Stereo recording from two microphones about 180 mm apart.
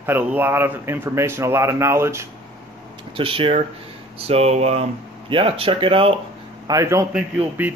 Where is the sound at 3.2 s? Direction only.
30° right (ahead or behind).